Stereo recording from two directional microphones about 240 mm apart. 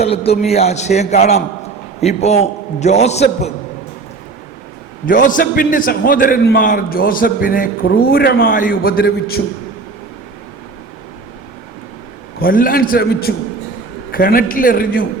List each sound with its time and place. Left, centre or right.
0.0 s a man's voice: left
5.0 s a man's voice: left
12.4 s a man's voice: left